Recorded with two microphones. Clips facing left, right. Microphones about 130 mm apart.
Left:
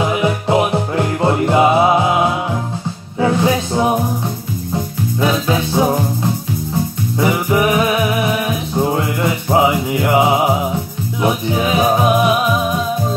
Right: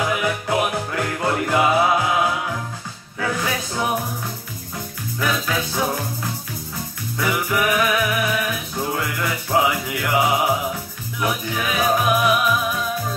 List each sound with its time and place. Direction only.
0.0 s music: 25° left (ahead or behind)
5.2 s music: 25° left (ahead or behind)